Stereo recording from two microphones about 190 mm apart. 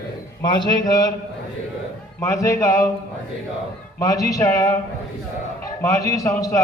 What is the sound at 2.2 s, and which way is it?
Speech, 15° left (ahead or behind).